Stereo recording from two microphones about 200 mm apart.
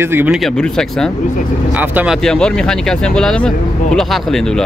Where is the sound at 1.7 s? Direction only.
10° right (ahead or behind).